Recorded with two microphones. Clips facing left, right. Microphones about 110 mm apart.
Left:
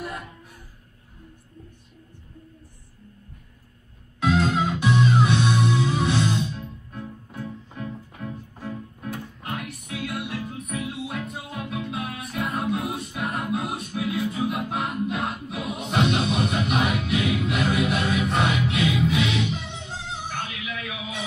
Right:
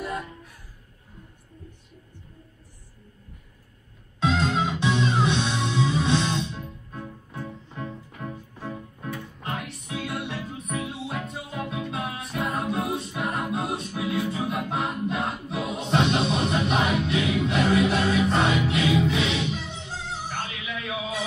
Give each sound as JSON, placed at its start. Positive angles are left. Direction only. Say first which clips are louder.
{"t": 4.2, "sound": "music", "louder": "left 2 dB", "side_deg": -25}
{"t": 8.6, "sound": "music", "louder": "left 1 dB", "side_deg": -25}